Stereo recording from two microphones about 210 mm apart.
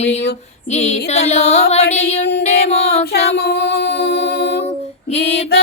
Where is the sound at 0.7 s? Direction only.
30° left (ahead or behind).